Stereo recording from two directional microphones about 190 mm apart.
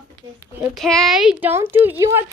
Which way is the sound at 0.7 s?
Centre (ahead or behind).